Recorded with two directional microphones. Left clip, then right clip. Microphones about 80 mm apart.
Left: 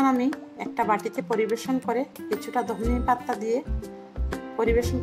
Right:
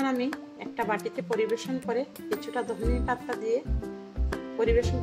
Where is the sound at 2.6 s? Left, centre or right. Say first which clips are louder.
Left 4 dB; left.